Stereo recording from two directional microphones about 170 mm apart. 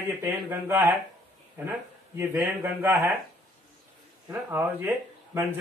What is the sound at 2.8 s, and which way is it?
Speech, 15° right (ahead or behind).